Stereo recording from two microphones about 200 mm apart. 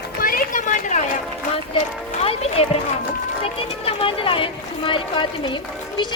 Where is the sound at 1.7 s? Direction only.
30° left (ahead or behind).